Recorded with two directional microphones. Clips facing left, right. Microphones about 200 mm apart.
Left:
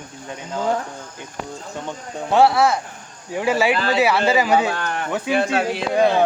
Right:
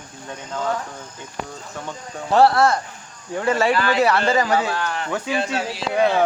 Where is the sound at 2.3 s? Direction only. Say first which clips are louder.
Even; centre (ahead or behind).